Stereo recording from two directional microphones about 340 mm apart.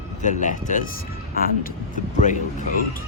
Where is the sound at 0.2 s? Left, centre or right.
Left.